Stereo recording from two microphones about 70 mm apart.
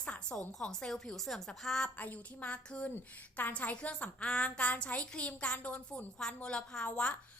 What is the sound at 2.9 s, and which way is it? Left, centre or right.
A woman's voice, left.